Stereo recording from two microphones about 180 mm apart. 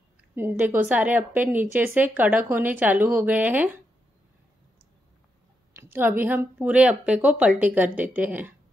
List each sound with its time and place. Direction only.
0.4 s a woman's voice: 10° right (ahead or behind)
5.7 s a woman's voice: 10° right (ahead or behind)